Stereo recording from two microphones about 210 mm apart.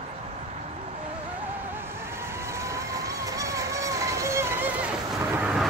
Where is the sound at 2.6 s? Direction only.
15° right (ahead or behind).